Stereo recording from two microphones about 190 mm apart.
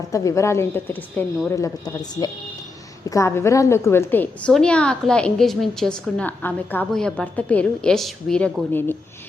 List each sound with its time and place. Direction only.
0.1 s a woman's voice: 15° left (ahead or behind)